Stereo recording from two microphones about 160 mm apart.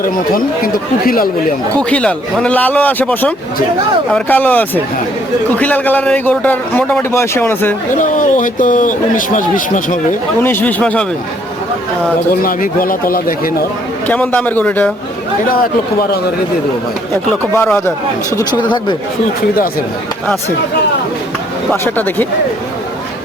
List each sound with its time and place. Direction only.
0.0 s speech: 65° left (ahead or behind)
1.8 s a man's voice: 5° left (ahead or behind)
7.9 s speech: 55° left (ahead or behind)
10.4 s a man's voice: 10° left (ahead or behind)
12.4 s speech: 60° left (ahead or behind)
14.1 s a man's voice: 10° left (ahead or behind)
17.5 s a man's voice: 15° left (ahead or behind)
18.3 s speech: 30° left (ahead or behind)
21.7 s a man's voice: 10° left (ahead or behind)